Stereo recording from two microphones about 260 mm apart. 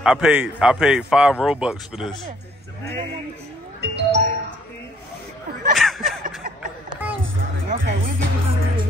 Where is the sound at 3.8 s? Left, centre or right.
Right.